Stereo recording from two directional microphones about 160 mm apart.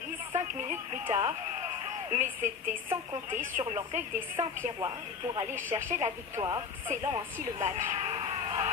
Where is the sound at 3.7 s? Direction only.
40° right (ahead or behind).